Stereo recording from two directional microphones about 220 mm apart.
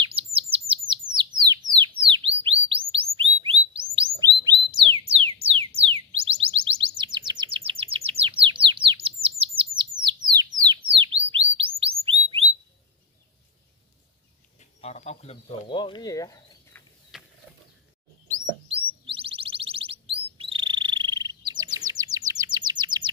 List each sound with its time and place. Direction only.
0.0 s chirp: 25° right (ahead or behind)
4.0 s bird: 20° right (ahead or behind)
5.1 s music: 25° right (ahead or behind)
5.8 s bird: 25° right (ahead or behind)
14.6 s a sound: 30° left (ahead or behind)
17.1 s a sound: centre (ahead or behind)
18.7 s chirp: 25° right (ahead or behind)